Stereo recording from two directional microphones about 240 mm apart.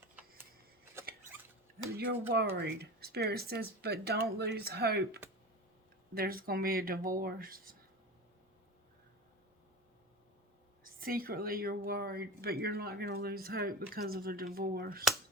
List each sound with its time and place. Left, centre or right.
2.0 s speech: right
10.8 s speech: right